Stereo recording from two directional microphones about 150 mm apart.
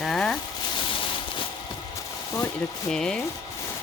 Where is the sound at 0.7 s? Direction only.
35° left (ahead or behind).